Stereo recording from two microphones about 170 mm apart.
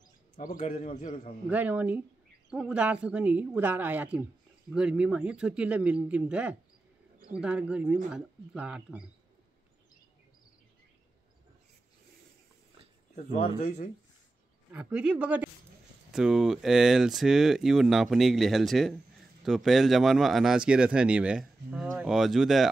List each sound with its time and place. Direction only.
0.4 s speech: 45° left (ahead or behind)
1.5 s speech: 10° right (ahead or behind)
13.1 s speech: 45° left (ahead or behind)
14.7 s speech: 10° right (ahead or behind)